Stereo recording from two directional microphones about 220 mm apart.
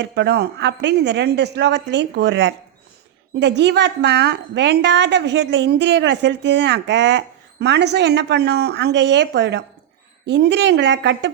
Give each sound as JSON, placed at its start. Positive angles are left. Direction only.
{"t": 0.0, "sound": "a woman's voice", "side_deg": -50}